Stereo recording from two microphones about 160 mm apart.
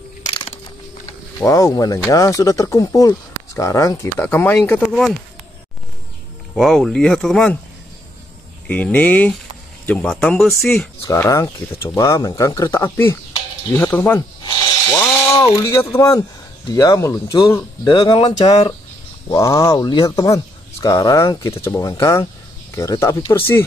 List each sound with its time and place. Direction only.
1.4 s speech: 20° left (ahead or behind)
6.5 s speech: centre (ahead or behind)
8.6 s speech: 10° left (ahead or behind)
11.1 s speech: 20° left (ahead or behind)
14.4 s ratchet: 20° left (ahead or behind)
15.3 s speech: 35° left (ahead or behind)
15.7 s speech: 15° left (ahead or behind)
17.8 s speech: 30° left (ahead or behind)
19.2 s speech: 20° left (ahead or behind)